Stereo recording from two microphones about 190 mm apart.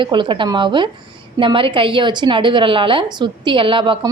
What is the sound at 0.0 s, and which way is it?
A woman's voice, 25° right (ahead or behind).